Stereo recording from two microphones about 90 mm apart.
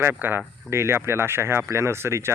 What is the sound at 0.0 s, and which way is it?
Speech, 25° right (ahead or behind).